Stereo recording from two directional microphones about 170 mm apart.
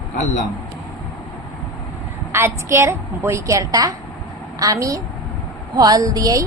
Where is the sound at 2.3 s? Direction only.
15° right (ahead or behind).